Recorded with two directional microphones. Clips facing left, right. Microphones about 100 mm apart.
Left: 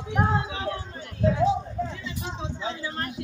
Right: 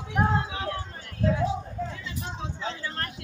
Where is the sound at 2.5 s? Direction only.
15° left (ahead or behind).